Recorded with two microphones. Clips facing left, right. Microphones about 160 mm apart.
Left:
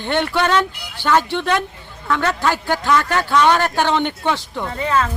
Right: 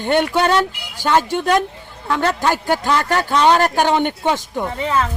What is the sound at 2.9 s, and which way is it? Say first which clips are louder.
Speech: left 2 dB; 35° right (ahead or behind).